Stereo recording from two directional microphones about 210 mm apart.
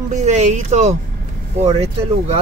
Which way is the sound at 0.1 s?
35° right (ahead or behind).